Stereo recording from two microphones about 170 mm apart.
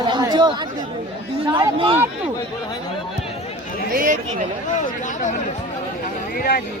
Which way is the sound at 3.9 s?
50° right (ahead or behind).